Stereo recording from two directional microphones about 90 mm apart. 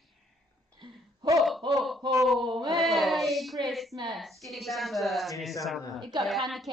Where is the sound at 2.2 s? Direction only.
Centre (ahead or behind).